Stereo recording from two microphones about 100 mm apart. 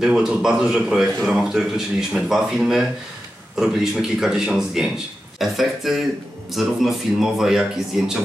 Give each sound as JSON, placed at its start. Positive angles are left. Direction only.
{"t": 0.0, "sound": "speech", "side_deg": -5}